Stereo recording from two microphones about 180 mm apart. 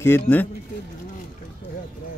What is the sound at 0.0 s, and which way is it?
Speech, 10° left (ahead or behind).